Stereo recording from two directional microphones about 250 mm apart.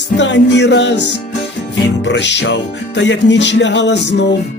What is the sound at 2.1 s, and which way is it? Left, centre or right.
Music, left.